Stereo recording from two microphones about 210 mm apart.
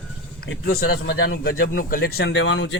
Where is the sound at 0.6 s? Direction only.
50° left (ahead or behind).